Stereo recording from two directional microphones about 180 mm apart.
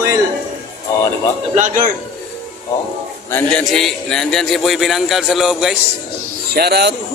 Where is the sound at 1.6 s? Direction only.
45° right (ahead or behind).